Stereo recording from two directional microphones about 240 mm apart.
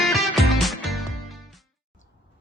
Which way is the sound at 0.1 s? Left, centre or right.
Centre.